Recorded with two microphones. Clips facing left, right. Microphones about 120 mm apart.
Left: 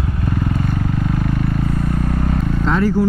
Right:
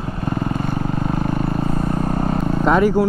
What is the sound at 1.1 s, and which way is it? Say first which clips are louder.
Vehicle: even; 35° right (ahead or behind).